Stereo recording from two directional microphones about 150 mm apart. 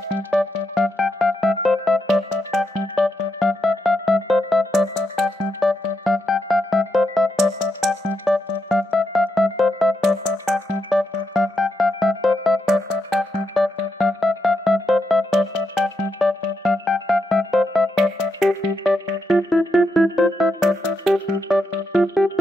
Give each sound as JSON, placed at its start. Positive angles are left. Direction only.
{"t": 0.7, "sound": "music", "side_deg": 0}